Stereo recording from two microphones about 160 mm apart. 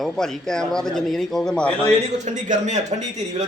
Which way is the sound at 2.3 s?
50° right (ahead or behind).